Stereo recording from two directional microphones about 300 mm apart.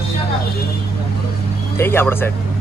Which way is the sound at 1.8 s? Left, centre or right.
Centre.